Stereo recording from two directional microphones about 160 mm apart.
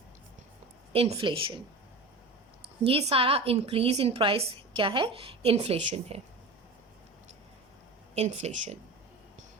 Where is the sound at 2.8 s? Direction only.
35° right (ahead or behind).